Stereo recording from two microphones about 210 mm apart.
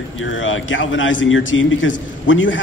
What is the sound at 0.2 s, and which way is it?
A man's voice, 65° left (ahead or behind).